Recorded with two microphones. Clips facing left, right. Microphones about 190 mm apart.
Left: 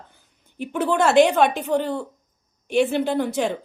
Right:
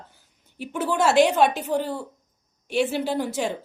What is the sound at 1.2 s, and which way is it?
A woman's voice, 5° right (ahead or behind).